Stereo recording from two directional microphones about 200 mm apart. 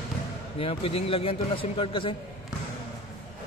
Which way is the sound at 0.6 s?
30° left (ahead or behind).